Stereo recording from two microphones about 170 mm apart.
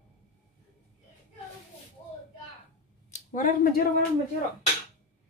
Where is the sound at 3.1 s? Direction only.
45° left (ahead or behind).